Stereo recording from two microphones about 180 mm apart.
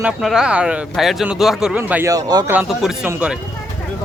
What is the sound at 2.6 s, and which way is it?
Speech, 5° right (ahead or behind).